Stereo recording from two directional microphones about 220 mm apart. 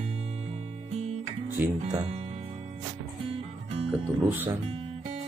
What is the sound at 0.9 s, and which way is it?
Music, 30° right (ahead or behind).